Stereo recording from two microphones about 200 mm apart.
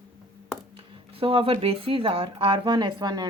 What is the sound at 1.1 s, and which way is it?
Speech, 25° right (ahead or behind).